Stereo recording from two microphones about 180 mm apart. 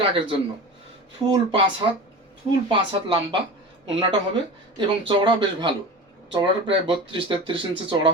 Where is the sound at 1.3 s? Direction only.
25° right (ahead or behind).